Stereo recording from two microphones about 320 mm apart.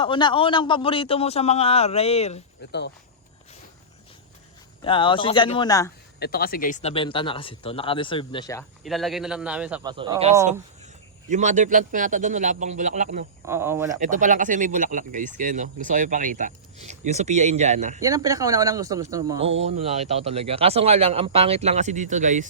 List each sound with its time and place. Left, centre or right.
0.0 s speech: centre
4.8 s speech: centre
6.1 s speech: left; by 8.6 s centre
8.8 s a man's voice: centre
9.9 s speech: centre
13.4 s speech: centre
14.0 s speech: right
18.0 s speech: centre